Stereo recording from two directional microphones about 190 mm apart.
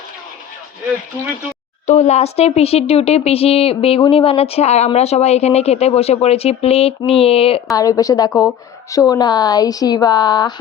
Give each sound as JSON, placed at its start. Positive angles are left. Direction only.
{"t": 1.9, "sound": "speech", "side_deg": 35}
{"t": 7.7, "sound": "a woman's voice", "side_deg": 20}